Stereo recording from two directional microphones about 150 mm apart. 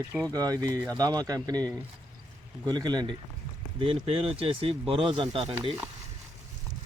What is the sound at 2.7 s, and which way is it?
Speech, 25° right (ahead or behind).